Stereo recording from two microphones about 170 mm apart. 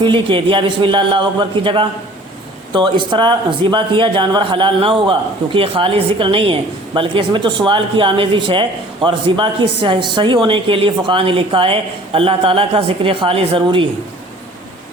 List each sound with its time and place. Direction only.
0.0 s a man's voice: 30° right (ahead or behind)